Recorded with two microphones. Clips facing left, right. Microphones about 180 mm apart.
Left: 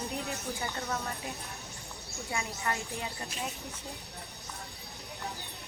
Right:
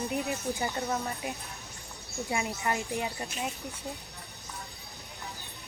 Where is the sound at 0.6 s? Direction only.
20° right (ahead or behind).